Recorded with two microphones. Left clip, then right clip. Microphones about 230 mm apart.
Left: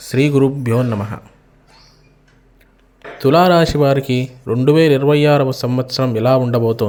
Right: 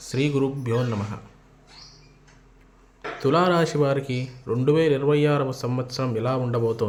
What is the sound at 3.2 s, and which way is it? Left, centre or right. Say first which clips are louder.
Speech: left 9 dB; left.